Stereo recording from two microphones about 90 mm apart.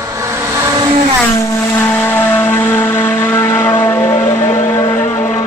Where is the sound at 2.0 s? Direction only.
25° left (ahead or behind).